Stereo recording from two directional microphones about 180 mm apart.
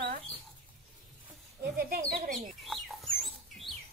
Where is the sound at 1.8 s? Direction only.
55° right (ahead or behind).